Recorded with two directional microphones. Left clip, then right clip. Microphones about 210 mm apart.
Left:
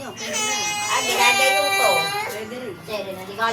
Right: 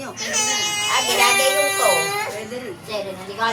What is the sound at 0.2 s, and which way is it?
Baby cry, 25° right (ahead or behind).